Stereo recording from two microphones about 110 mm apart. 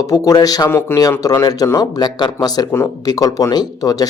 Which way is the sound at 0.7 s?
20° left (ahead or behind).